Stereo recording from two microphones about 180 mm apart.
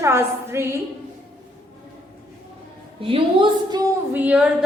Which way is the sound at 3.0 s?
30° right (ahead or behind).